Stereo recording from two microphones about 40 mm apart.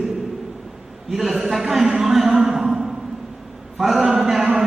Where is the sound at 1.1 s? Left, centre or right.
Centre.